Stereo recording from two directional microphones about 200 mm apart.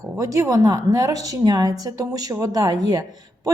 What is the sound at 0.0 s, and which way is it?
A woman's voice, 15° right (ahead or behind).